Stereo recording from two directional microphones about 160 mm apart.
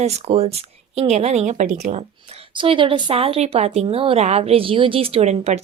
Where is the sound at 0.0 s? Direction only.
40° right (ahead or behind).